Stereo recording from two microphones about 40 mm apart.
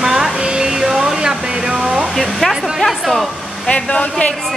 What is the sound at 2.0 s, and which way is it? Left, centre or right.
Hair dryer, centre.